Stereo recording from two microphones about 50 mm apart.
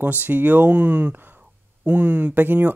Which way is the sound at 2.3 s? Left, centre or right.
Right.